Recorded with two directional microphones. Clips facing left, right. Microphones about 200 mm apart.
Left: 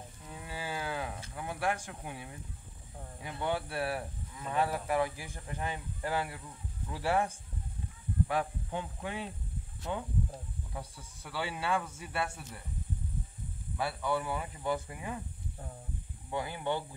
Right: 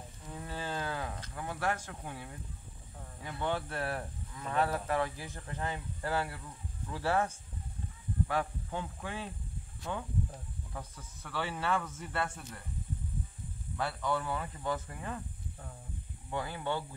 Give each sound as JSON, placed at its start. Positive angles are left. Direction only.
{"t": 0.3, "sound": "cattle", "side_deg": 10}
{"t": 3.2, "sound": "speech", "side_deg": 15}
{"t": 8.3, "sound": "a man's voice", "side_deg": 15}
{"t": 13.7, "sound": "speech", "side_deg": 10}
{"t": 16.3, "sound": "speech", "side_deg": 15}